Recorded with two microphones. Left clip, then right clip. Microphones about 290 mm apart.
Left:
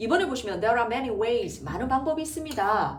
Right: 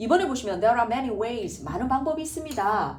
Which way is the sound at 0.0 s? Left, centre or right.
Centre.